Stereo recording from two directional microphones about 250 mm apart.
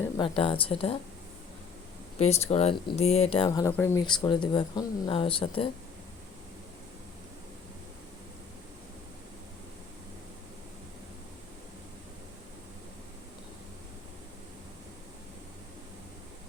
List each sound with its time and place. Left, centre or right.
0.2 s speech: left
2.1 s speech: left